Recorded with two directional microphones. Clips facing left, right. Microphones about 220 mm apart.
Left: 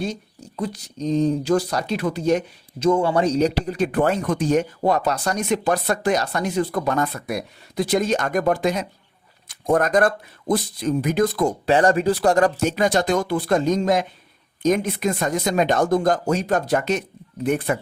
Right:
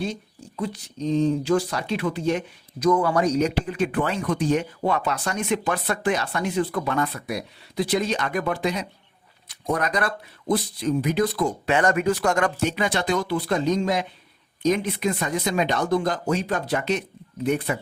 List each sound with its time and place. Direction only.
0.0 s speech: 40° left (ahead or behind)
2.7 s speech: 25° left (ahead or behind); by 17.7 s 50° left (ahead or behind)